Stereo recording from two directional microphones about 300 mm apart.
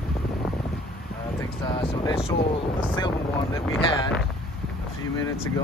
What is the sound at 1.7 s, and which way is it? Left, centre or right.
Speech, centre.